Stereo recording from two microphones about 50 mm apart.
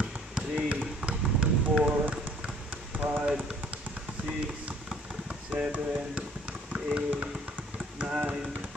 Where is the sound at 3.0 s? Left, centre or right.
Right.